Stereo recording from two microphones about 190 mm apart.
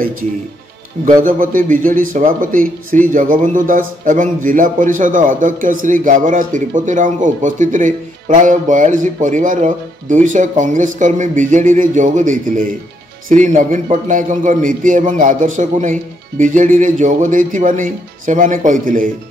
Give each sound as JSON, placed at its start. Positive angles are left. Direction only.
{"t": 1.2, "sound": "a man's voice", "side_deg": -45}